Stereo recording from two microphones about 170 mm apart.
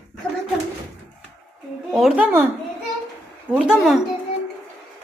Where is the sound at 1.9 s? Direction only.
5° right (ahead or behind).